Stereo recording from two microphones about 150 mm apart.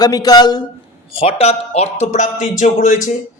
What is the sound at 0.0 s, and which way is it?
Speech, 25° left (ahead or behind).